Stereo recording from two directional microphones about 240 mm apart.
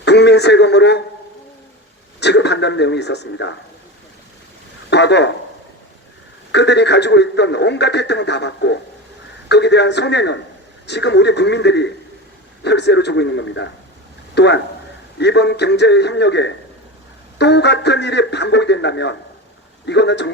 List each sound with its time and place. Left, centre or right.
0.0 s a sound: left
2.2 s a man's voice: left
4.9 s a man's voice: left
6.5 s a man's voice: left